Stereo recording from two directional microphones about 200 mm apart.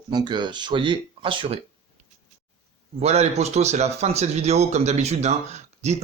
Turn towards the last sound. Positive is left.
turn(degrees=-35)  # may be behind; listen again after turning